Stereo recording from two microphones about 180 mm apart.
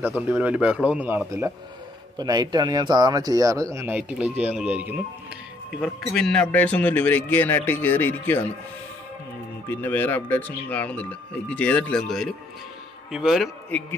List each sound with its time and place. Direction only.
0.0 s a man's voice: 5° right (ahead or behind)
2.1 s speech: 20° right (ahead or behind); by 8.5 s 10° left (ahead or behind)
9.7 s a man's voice: 10° left (ahead or behind)
13.7 s speech: 10° left (ahead or behind)